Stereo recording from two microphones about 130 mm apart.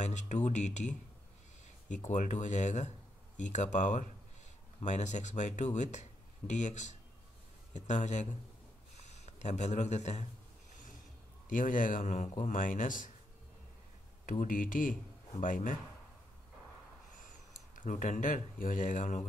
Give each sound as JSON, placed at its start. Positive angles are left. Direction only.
{"t": 0.0, "sound": "speech", "side_deg": 65}
{"t": 8.9, "sound": "a sound", "side_deg": 60}
{"t": 11.4, "sound": "speech", "side_deg": 90}
{"t": 14.2, "sound": "speech", "side_deg": 80}
{"t": 17.7, "sound": "speech", "side_deg": 85}